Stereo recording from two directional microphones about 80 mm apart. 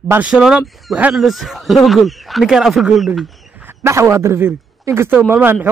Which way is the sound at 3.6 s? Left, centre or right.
Right.